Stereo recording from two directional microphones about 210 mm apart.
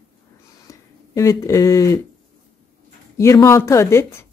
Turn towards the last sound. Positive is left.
turn(degrees=15)  # may be behind; listen again after turning